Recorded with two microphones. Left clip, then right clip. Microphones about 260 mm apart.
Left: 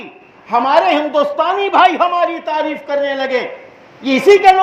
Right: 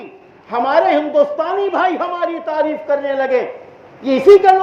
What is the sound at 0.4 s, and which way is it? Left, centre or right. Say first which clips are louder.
A man's voice: left 2 dB; left.